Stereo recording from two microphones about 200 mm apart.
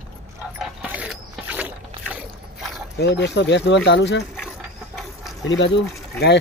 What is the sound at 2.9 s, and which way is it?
Speech, 60° left (ahead or behind).